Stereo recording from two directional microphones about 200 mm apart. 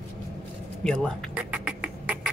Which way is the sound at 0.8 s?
5° left (ahead or behind).